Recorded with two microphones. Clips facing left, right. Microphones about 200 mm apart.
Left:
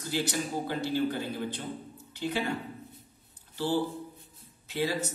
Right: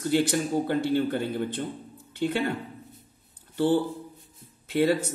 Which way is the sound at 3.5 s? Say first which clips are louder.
Right 6 dB; 55° right (ahead or behind).